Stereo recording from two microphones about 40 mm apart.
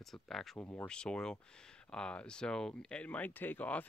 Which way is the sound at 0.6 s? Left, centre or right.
Left.